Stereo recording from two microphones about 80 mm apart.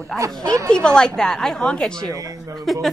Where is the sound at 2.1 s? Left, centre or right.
Right.